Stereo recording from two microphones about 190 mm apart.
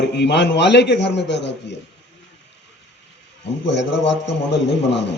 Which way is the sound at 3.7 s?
65° left (ahead or behind).